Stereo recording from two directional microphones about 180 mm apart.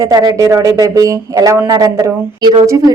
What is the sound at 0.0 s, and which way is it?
Speech, 20° right (ahead or behind).